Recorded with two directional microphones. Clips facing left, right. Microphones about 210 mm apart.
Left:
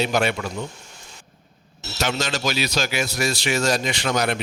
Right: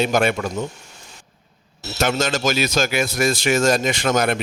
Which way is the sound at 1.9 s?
50° right (ahead or behind).